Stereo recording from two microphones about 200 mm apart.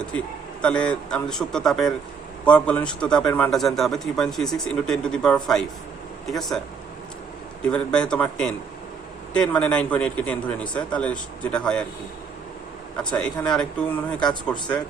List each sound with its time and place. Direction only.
0.6 s a man's voice: 5° left (ahead or behind)
7.6 s a man's voice: 5° left (ahead or behind)
13.1 s a man's voice: 5° left (ahead or behind)